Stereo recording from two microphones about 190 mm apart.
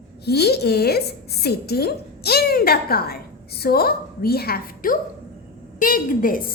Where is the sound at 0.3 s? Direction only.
60° left (ahead or behind).